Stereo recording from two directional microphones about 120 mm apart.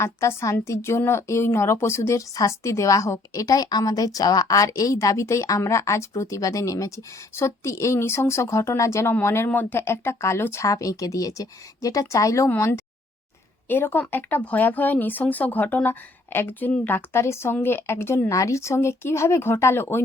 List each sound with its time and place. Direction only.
0.0 s a woman's voice: 20° left (ahead or behind)